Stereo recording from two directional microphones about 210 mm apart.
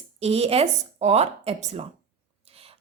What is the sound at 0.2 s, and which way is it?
A woman's voice, 30° right (ahead or behind).